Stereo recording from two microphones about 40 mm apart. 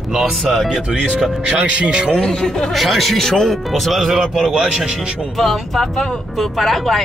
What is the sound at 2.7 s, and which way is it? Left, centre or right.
Speech, centre.